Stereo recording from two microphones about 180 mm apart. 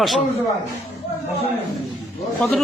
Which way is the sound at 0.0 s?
Centre (ahead or behind).